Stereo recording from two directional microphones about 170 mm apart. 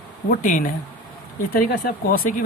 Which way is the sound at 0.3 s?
55° left (ahead or behind).